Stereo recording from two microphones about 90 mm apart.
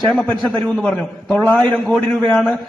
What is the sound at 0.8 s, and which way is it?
A man's voice, 5° left (ahead or behind).